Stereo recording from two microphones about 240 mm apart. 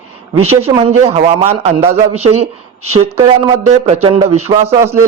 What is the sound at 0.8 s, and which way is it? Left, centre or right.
Speech, right.